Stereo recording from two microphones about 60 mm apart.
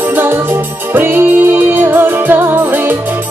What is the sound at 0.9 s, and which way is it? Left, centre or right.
Music, right.